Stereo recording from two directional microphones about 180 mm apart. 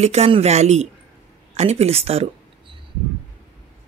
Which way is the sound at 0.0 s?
35° right (ahead or behind).